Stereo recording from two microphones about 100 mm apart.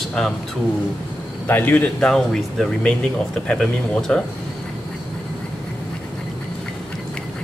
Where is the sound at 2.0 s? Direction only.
5° left (ahead or behind).